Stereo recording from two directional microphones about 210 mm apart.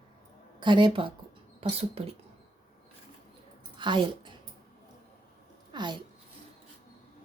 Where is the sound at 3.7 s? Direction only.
20° right (ahead or behind).